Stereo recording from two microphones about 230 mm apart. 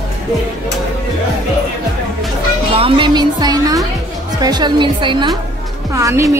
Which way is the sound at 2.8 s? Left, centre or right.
Centre.